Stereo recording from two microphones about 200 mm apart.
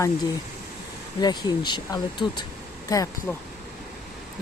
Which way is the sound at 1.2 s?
20° left (ahead or behind).